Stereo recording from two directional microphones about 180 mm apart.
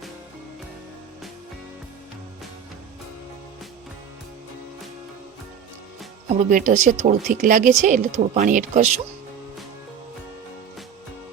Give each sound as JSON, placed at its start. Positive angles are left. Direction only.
{"t": 6.2, "sound": "speech", "side_deg": -40}